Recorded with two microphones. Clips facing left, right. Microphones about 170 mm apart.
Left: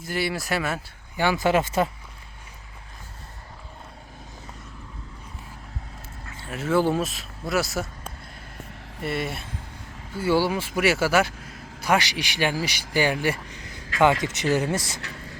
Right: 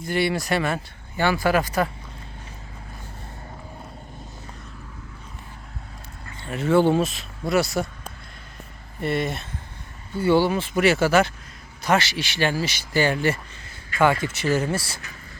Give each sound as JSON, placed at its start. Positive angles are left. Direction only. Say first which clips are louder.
{"t": 0.0, "sound": "speech", "louder": "right 4 dB", "side_deg": 5}
{"t": 6.2, "sound": "speech", "louder": "right 4 dB", "side_deg": 5}